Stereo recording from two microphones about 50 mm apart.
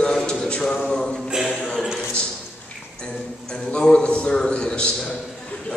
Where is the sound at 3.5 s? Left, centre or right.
Centre.